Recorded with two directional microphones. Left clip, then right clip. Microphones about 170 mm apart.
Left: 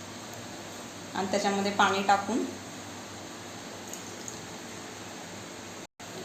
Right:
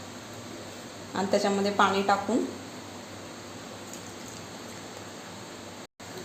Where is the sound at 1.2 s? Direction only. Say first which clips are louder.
Right 2 dB; 60° right (ahead or behind).